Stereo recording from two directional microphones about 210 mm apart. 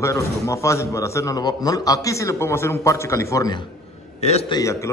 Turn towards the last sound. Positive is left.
turn(degrees=15)  # may be behind; listen again after turning